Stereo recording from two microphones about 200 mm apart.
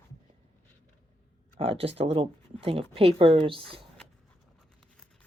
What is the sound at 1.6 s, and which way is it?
Speech, 30° right (ahead or behind).